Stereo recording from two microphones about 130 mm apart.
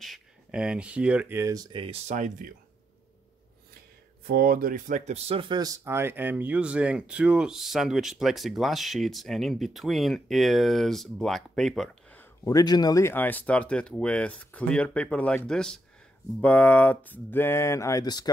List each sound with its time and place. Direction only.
0.0 s speech: 5° right (ahead or behind)
1.4 s speech: 25° right (ahead or behind)
1.7 s speech: 40° right (ahead or behind)
2.0 s speech: 75° right (ahead or behind)
4.6 s speech: 90° right; by 5.2 s 65° right (ahead or behind)
5.3 s speech: 40° right (ahead or behind); by 11.9 s centre (ahead or behind)
12.4 s speech: 30° left (ahead or behind)